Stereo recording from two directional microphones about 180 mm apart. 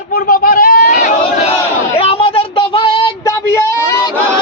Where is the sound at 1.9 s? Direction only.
30° left (ahead or behind).